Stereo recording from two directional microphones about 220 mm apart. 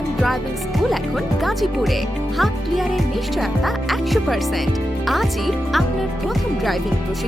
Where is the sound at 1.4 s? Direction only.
Centre (ahead or behind).